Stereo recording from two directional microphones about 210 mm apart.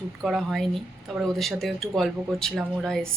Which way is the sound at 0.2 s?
Centre (ahead or behind).